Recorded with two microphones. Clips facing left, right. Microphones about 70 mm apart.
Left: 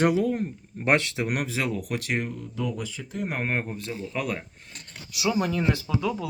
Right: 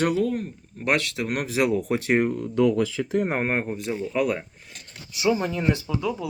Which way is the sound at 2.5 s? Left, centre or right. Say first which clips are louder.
Right 13 dB; right.